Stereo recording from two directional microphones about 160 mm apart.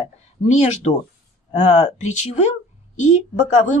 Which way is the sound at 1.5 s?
45° left (ahead or behind).